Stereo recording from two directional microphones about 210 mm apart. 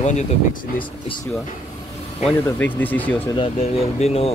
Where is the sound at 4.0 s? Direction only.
30° left (ahead or behind).